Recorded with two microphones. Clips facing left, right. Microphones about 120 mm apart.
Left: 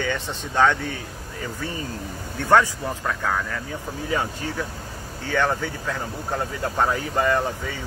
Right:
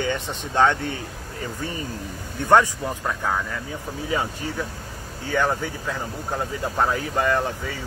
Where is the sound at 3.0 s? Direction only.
10° right (ahead or behind).